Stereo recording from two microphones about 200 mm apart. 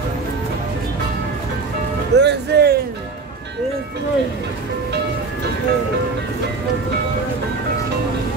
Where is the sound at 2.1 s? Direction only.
60° right (ahead or behind).